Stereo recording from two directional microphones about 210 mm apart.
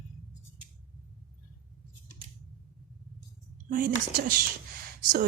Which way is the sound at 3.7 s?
40° right (ahead or behind).